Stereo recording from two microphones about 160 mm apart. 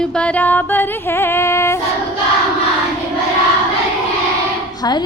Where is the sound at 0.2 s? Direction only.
10° left (ahead or behind).